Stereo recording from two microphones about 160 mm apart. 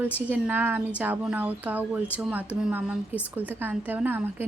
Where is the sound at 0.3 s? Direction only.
10° right (ahead or behind).